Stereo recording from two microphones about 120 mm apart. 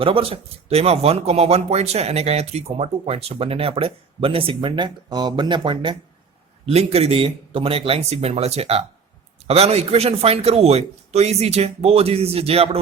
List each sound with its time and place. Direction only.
0.0 s speech: 50° right (ahead or behind)
6.7 s speech: 55° right (ahead or behind)